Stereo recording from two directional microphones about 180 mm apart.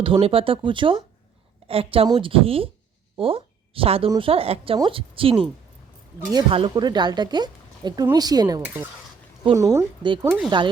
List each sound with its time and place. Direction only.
0.0 s a woman's voice: 30° right (ahead or behind)
6.5 s speech: 25° right (ahead or behind)
8.6 s a woman's voice: 10° right (ahead or behind)
10.2 s speech: 5° right (ahead or behind)